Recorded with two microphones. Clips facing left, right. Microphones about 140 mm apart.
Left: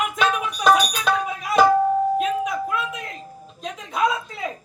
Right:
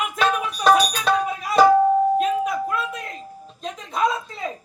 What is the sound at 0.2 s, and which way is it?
Music, centre (ahead or behind).